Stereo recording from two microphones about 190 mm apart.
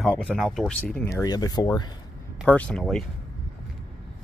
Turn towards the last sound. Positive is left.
turn(degrees=5)  # may be behind; listen again after turning